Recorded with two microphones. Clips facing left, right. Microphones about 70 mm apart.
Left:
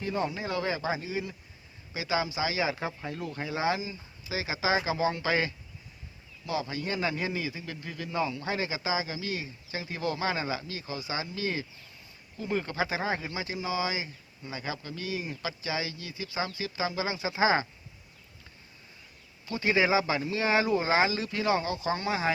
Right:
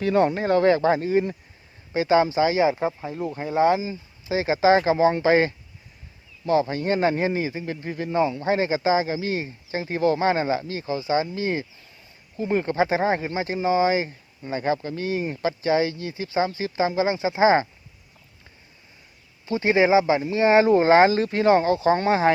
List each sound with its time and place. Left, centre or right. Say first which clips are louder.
0.0 s speech: right 11 dB; right
2.8 s speech: right 8 dB; right
3.4 s speech: right 10 dB; right
19.5 s speech: right 7 dB; right